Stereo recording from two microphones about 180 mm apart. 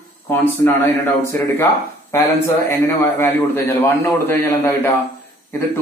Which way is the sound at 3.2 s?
15° left (ahead or behind).